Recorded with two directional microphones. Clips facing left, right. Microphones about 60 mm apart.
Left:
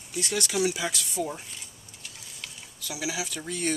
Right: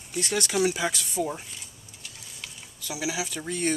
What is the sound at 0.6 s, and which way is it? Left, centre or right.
Speech, right.